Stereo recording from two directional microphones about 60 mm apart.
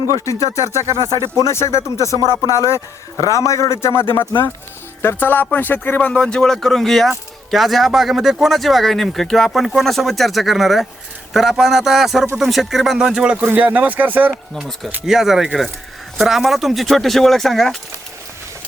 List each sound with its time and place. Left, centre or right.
0.1 s a man's voice: left
0.9 s speech: right
1.5 s a man's voice: left
5.0 s speech: left
6.1 s speech: centre
6.4 s speech: centre
13.6 s speech: right
15.0 s speech: centre